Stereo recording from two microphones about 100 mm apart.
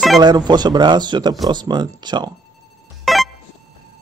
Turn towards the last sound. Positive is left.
turn(degrees=0)  # may be behind; listen again after turning